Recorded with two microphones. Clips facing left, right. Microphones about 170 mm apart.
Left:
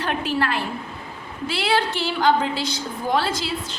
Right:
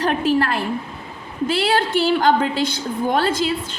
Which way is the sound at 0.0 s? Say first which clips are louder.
Right 5 dB; 45° right (ahead or behind).